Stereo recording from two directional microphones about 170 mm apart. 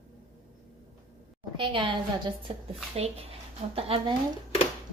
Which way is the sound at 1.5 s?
30° right (ahead or behind).